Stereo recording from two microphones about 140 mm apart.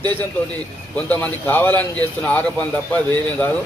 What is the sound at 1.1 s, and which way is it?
A man's voice, 10° left (ahead or behind).